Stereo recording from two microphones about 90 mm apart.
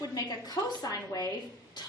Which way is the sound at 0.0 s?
45° left (ahead or behind).